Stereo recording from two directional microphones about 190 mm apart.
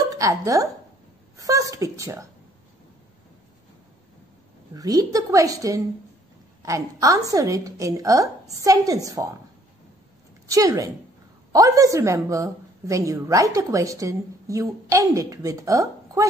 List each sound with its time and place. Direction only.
0.1 s a woman's voice: 15° right (ahead or behind)
4.7 s a woman's voice: 20° right (ahead or behind)
10.5 s a woman's voice: 20° right (ahead or behind)